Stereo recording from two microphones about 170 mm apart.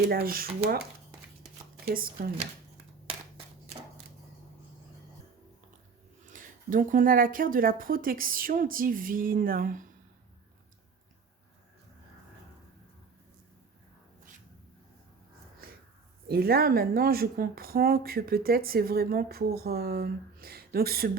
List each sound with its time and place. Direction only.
0.0 s a woman's voice: 65° right (ahead or behind)
1.9 s a woman's voice: 60° right (ahead or behind)
6.3 s a woman's voice: 50° right (ahead or behind)
16.2 s a woman's voice: 65° right (ahead or behind)